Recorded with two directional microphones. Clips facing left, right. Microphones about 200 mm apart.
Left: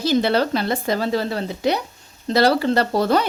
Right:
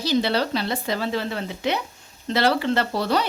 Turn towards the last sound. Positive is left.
turn(degrees=45)  # may be behind; listen again after turning